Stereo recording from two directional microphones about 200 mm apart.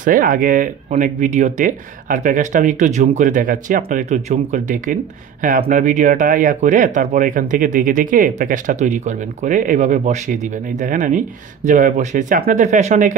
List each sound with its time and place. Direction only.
0.0 s speech: 45° right (ahead or behind)